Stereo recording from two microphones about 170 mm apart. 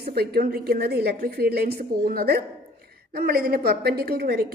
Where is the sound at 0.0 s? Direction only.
65° right (ahead or behind).